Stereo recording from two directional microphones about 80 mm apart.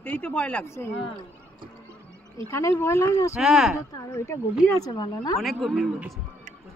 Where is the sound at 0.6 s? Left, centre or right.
Left.